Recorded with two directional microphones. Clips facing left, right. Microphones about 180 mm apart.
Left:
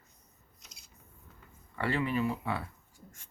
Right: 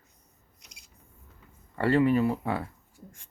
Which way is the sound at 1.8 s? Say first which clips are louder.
Right 8 dB; 45° right (ahead or behind).